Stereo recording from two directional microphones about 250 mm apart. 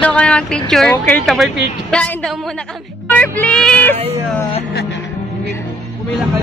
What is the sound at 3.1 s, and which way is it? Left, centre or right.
Speech, centre.